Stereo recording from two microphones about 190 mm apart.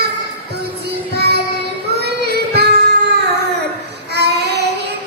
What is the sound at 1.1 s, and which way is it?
Child singing, 60° right (ahead or behind).